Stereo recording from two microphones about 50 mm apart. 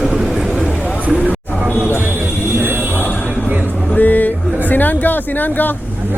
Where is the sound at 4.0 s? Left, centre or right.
Left.